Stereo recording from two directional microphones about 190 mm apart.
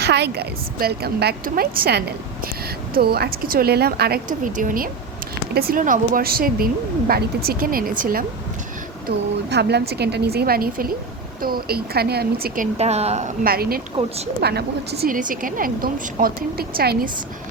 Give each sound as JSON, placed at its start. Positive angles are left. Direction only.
{"t": 0.0, "sound": "a woman's voice", "side_deg": -60}
{"t": 9.0, "sound": "a woman's voice", "side_deg": -60}
{"t": 12.7, "sound": "a woman's voice", "side_deg": -35}
{"t": 13.4, "sound": "a woman's voice", "side_deg": -55}